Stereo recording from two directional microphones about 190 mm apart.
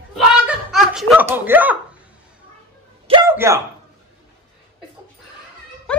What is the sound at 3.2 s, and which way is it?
Speech, 15° right (ahead or behind).